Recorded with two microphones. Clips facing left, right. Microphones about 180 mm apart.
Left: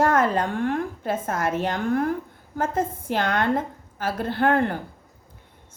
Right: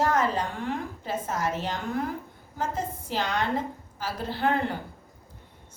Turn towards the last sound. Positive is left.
turn(degrees=55)  # may be behind; listen again after turning